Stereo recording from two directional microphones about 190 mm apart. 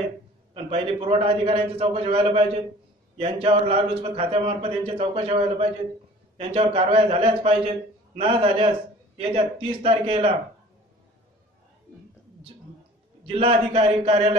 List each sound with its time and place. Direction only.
0.7 s a man's voice: 30° right (ahead or behind)
13.3 s a man's voice: 30° right (ahead or behind)